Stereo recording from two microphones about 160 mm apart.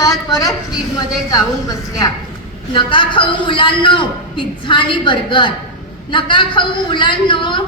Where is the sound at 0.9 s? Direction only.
25° left (ahead or behind).